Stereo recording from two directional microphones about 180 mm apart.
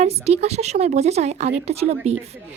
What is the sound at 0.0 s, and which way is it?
Speech, 35° right (ahead or behind).